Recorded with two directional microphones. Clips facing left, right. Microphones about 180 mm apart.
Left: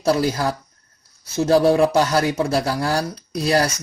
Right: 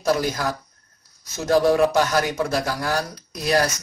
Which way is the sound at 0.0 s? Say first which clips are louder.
Left 3 dB; 30° left (ahead or behind).